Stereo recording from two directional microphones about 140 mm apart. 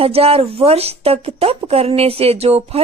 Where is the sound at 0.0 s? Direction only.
45° right (ahead or behind).